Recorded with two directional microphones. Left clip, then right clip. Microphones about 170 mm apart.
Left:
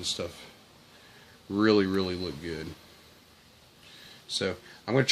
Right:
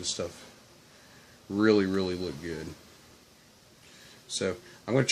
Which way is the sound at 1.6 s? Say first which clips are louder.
Even; 15° left (ahead or behind).